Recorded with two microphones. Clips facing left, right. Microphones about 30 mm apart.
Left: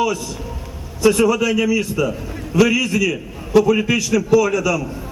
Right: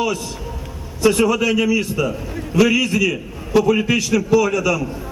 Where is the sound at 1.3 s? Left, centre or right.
Centre.